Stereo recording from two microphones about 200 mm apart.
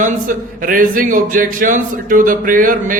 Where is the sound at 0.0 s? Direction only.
40° right (ahead or behind).